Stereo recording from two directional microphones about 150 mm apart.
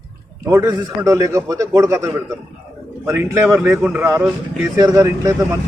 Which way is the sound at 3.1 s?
20° right (ahead or behind).